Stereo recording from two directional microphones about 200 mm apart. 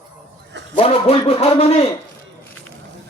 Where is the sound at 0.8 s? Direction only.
30° left (ahead or behind).